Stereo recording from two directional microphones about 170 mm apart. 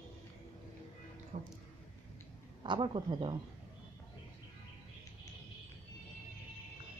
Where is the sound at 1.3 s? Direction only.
45° right (ahead or behind).